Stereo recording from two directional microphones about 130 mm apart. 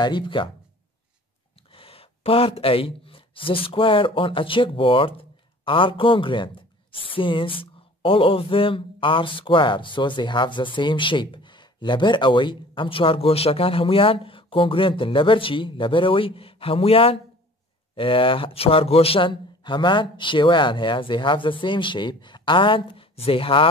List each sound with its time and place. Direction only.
0.0 s speech: 35° left (ahead or behind)
1.7 s speech: 45° left (ahead or behind)